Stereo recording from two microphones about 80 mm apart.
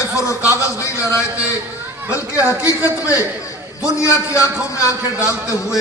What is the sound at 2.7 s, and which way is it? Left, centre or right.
A man's voice, left.